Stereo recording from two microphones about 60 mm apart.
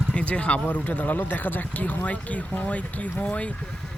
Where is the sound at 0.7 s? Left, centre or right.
Left.